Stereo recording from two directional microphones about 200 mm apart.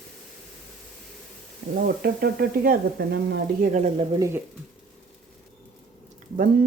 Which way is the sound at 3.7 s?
35° right (ahead or behind).